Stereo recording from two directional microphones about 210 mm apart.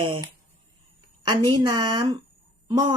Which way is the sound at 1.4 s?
20° right (ahead or behind).